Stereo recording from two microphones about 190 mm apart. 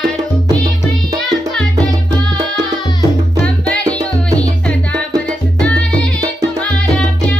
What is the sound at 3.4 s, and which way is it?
Music, 5° left (ahead or behind).